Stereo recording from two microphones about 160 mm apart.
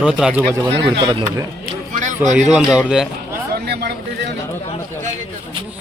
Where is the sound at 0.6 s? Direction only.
30° right (ahead or behind).